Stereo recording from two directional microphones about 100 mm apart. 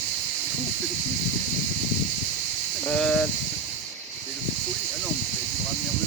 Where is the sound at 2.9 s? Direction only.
10° left (ahead or behind).